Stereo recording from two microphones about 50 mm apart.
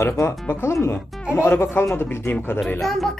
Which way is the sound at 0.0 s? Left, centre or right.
Left.